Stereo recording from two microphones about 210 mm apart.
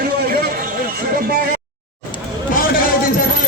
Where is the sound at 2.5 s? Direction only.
45° left (ahead or behind).